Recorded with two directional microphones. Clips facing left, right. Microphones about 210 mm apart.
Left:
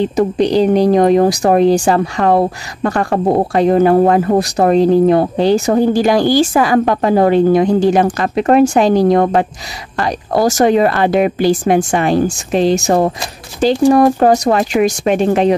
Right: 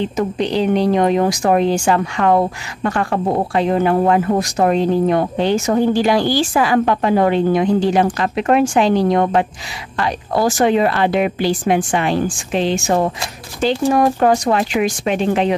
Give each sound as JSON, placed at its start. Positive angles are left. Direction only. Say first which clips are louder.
{"t": 0.0, "sound": "speech", "louder": "left 6 dB", "side_deg": 40}